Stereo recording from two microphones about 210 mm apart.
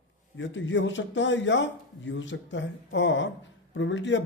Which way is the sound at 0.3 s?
60° left (ahead or behind).